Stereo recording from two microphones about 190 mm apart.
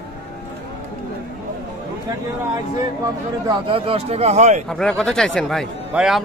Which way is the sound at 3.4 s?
30° right (ahead or behind).